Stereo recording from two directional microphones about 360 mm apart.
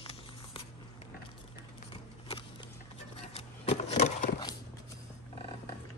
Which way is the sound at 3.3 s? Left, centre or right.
Centre.